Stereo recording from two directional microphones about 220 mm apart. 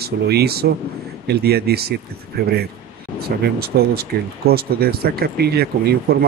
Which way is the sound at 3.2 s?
45° right (ahead or behind).